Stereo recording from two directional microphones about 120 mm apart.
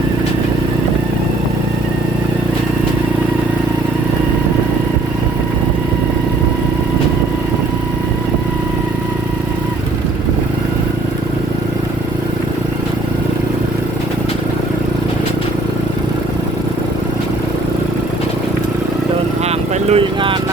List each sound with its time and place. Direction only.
19.5 s vehicle: 55° right (ahead or behind)